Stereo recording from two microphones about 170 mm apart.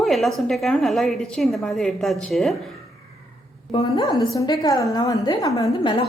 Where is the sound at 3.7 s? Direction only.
30° left (ahead or behind).